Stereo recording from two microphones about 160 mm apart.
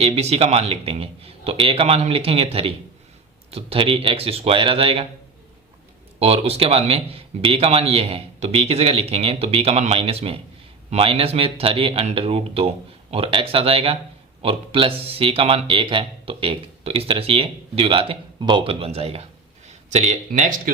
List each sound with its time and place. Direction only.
0.0 s speech: 40° right (ahead or behind)
6.1 s speech: 40° right (ahead or behind)